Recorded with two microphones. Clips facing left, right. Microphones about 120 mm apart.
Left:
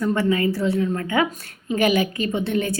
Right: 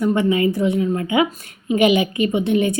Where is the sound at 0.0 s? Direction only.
20° right (ahead or behind).